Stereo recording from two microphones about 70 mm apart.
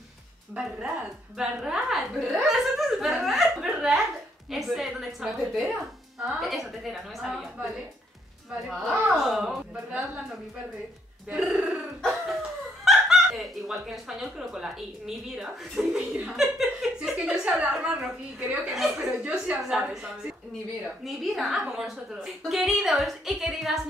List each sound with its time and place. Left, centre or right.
0.6 s a woman's voice: centre
9.1 s speech: centre
11.2 s speech: centre
12.0 s cough: centre
12.8 s a woman's voice: centre
19.2 s speech: centre
21.0 s a woman's voice: centre